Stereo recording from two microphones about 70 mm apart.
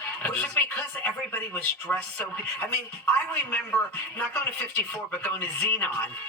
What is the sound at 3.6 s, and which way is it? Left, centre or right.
Speech, centre.